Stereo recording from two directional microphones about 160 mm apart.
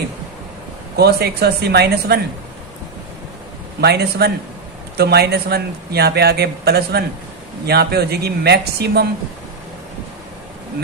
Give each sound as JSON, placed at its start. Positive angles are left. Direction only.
{"t": 0.9, "sound": "speech", "side_deg": -85}
{"t": 3.8, "sound": "a man's voice", "side_deg": -90}